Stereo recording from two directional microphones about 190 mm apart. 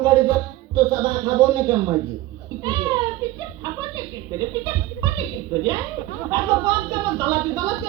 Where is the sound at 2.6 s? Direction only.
20° right (ahead or behind).